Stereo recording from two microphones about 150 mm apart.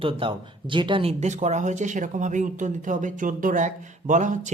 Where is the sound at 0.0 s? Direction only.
35° right (ahead or behind).